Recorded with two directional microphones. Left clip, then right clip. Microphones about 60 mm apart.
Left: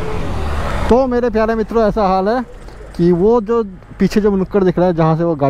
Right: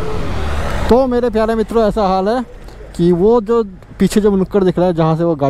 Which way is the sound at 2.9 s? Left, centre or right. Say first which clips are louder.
Right 1 dB; right.